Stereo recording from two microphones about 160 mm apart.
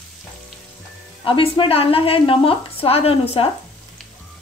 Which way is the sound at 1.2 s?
35° left (ahead or behind).